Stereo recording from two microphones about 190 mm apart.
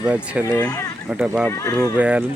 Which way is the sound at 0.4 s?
15° left (ahead or behind).